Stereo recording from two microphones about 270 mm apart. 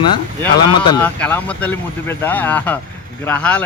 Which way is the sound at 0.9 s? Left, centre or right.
Centre.